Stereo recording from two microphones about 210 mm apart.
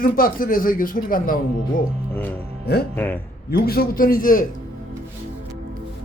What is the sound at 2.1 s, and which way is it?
Music, 10° left (ahead or behind).